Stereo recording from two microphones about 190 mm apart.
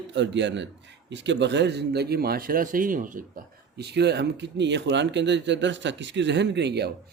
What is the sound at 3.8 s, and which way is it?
Speech, 60° right (ahead or behind).